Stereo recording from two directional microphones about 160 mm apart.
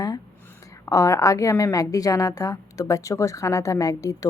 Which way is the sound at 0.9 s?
20° left (ahead or behind).